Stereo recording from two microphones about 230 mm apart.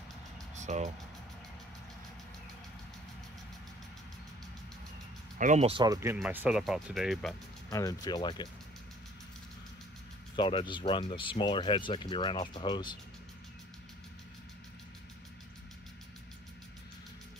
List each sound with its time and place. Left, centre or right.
0.6 s speech: right
5.4 s speech: right; by 7.3 s centre
7.7 s speech: centre
10.3 s speech: left